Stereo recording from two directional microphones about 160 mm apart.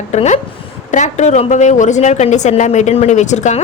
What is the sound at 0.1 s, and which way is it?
A woman's voice, 45° left (ahead or behind).